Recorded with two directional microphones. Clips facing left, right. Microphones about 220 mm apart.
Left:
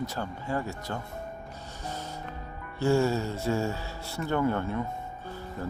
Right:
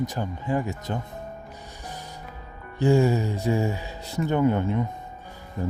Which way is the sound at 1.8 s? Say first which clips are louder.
Left 3 dB; 15° right (ahead or behind).